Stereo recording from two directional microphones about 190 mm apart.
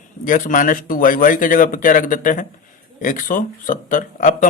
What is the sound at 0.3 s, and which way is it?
Speech, 45° left (ahead or behind).